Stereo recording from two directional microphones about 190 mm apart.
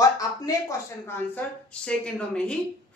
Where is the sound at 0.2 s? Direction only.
15° left (ahead or behind).